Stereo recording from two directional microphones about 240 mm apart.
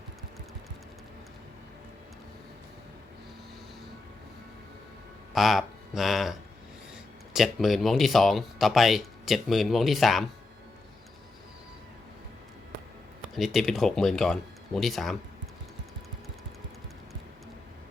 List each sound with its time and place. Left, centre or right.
5.3 s speech: centre
7.3 s speech: centre
13.3 s speech: centre